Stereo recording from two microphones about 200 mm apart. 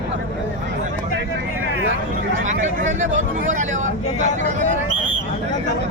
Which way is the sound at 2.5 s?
35° right (ahead or behind).